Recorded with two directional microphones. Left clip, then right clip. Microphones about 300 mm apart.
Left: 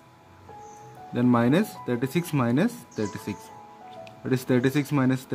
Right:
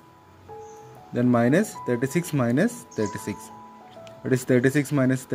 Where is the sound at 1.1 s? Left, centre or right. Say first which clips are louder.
Right 2 dB; centre.